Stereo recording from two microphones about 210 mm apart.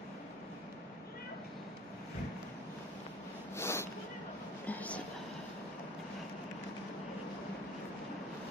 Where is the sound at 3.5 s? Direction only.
10° left (ahead or behind).